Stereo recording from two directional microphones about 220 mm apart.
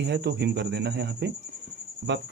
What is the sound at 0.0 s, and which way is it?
Speech, 50° right (ahead or behind).